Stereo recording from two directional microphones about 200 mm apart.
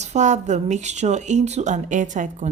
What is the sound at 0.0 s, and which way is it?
A woman's voice, 35° right (ahead or behind).